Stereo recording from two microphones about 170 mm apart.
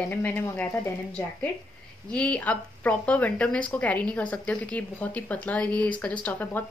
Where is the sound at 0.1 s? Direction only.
10° left (ahead or behind).